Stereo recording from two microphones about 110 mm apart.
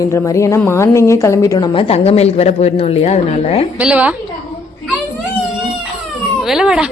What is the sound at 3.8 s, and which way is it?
Speech, 10° right (ahead or behind).